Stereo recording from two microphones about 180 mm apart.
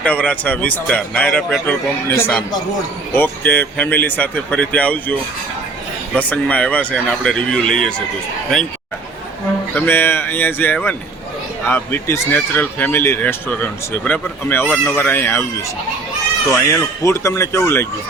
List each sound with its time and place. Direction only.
0.0 s speech: 10° left (ahead or behind)
6.1 s speech: 10° left (ahead or behind)
9.7 s speech: 10° left (ahead or behind)
16.7 s speech: 15° left (ahead or behind)